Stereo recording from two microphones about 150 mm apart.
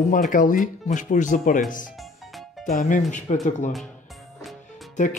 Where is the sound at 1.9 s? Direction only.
Centre (ahead or behind).